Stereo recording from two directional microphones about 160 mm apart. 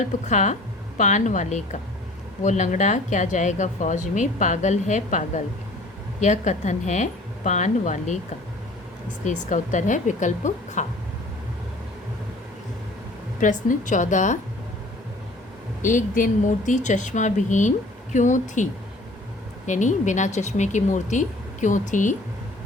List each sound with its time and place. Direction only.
0.0 s a woman's voice: 50° left (ahead or behind)
9.2 s a woman's voice: 50° left (ahead or behind)
13.4 s a woman's voice: 55° left (ahead or behind)
15.8 s a woman's voice: 55° left (ahead or behind)